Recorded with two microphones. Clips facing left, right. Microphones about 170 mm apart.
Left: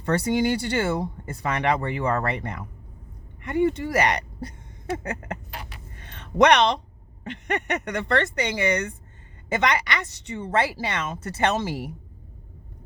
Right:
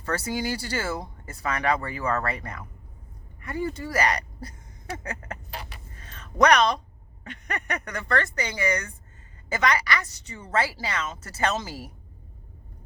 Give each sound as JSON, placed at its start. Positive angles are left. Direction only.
{"t": 0.0, "sound": "speech", "side_deg": 25}
{"t": 6.0, "sound": "a sound", "side_deg": 30}
{"t": 7.3, "sound": "speech", "side_deg": 30}